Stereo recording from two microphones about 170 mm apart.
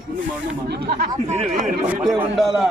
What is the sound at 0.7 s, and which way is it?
Speech, 70° right (ahead or behind).